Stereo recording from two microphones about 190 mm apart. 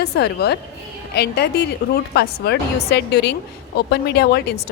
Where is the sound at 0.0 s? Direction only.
60° left (ahead or behind).